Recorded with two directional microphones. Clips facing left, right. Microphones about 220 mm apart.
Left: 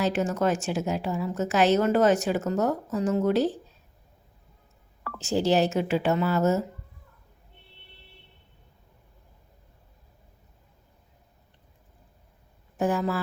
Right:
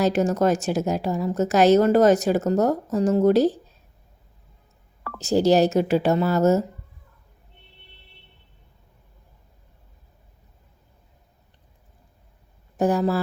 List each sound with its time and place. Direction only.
0.0 s a woman's voice: 40° right (ahead or behind)
5.0 s a woman's voice: 40° right (ahead or behind)
12.7 s speech: 35° right (ahead or behind)